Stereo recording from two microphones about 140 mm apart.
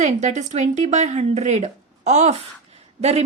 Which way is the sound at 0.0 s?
55° right (ahead or behind).